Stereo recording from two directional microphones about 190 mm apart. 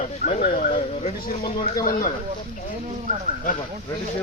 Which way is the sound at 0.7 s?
35° left (ahead or behind).